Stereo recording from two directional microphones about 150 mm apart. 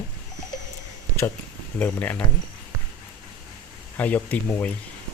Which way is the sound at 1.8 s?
10° left (ahead or behind).